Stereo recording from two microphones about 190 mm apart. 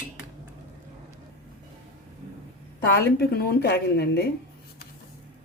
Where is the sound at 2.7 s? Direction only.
55° left (ahead or behind).